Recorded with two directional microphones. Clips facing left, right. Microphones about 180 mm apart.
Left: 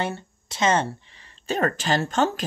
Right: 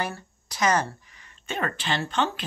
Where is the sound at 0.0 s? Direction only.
25° left (ahead or behind).